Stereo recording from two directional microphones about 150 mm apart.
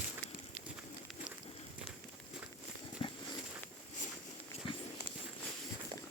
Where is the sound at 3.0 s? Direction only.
35° left (ahead or behind).